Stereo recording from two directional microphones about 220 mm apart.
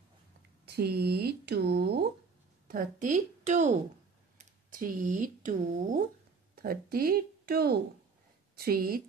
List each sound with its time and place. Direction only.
0.7 s speech: 45° right (ahead or behind)
2.7 s a woman's voice: 35° right (ahead or behind)